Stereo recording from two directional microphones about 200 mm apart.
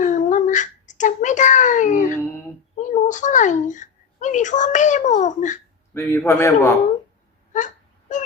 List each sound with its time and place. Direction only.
0.0 s a sound: 40° left (ahead or behind)
5.9 s a man's voice: 10° left (ahead or behind)
8.1 s wail: 40° left (ahead or behind)